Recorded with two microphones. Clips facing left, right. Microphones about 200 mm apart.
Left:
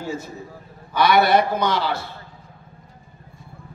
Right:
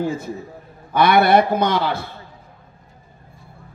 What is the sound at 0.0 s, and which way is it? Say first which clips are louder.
Speech: right 6 dB; 55° right (ahead or behind).